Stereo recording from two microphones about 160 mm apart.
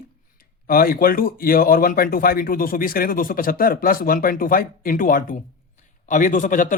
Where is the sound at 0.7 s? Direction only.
65° left (ahead or behind).